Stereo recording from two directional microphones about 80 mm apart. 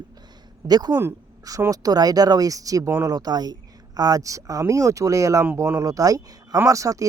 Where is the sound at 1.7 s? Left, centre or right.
Right.